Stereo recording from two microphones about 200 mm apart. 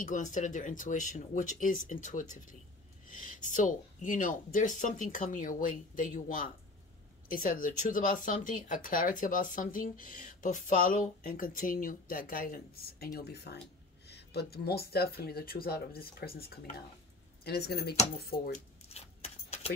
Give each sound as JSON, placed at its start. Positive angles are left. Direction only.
{"t": 0.0, "sound": "speech", "side_deg": 40}
{"t": 18.9, "sound": "keys jangling", "side_deg": 30}